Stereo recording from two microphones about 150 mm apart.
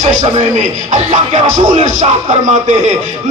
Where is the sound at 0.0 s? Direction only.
60° right (ahead or behind).